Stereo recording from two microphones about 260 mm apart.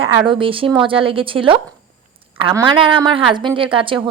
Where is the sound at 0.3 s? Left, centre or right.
Centre.